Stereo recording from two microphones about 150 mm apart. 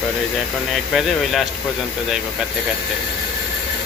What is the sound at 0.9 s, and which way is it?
Speech, centre (ahead or behind).